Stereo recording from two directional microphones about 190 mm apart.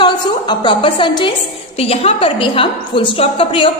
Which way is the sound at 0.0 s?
25° left (ahead or behind).